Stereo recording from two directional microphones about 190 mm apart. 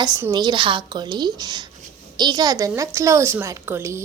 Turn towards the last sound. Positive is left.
turn(degrees=-15)  # may be behind; listen again after turning